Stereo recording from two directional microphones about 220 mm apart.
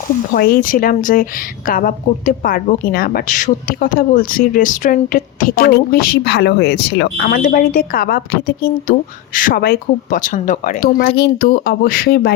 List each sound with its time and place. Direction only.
0.3 s a woman's voice: 40° left (ahead or behind)